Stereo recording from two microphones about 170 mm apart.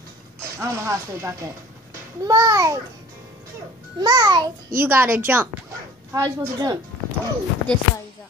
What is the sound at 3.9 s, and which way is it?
Speech, 25° right (ahead or behind).